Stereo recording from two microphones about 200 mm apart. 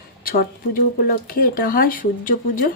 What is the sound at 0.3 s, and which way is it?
A woman's voice, 45° left (ahead or behind).